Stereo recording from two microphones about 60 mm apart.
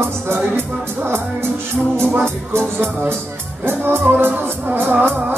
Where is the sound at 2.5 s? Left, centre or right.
Right.